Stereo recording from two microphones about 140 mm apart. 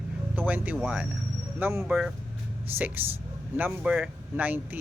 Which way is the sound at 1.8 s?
5° right (ahead or behind).